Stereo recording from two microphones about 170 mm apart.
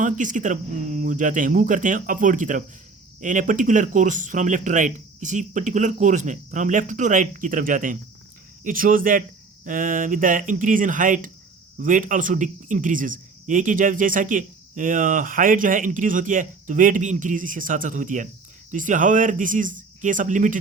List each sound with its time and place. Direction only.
0.0 s a man's voice: 50° right (ahead or behind)